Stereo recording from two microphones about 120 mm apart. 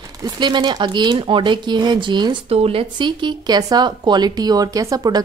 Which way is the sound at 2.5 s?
55° right (ahead or behind).